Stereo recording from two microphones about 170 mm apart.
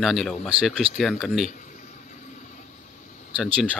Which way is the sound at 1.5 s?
50° left (ahead or behind).